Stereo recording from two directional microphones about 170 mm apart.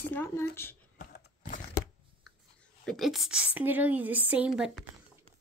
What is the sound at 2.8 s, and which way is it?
A woman's voice, centre (ahead or behind).